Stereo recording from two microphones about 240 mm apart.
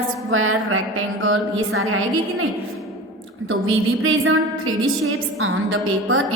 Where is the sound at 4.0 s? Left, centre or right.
Right.